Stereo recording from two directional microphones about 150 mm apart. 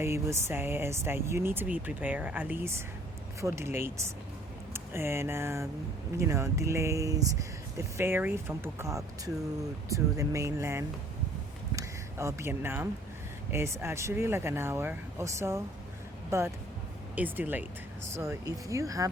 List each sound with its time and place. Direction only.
0.0 s speech: 20° right (ahead or behind)